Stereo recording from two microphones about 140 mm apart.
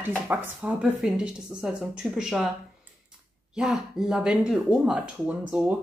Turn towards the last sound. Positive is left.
turn(degrees=-5)  # may be behind; listen again after turning